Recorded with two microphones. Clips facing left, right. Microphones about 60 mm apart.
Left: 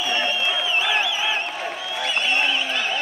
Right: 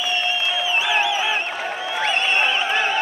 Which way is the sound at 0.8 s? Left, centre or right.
Centre.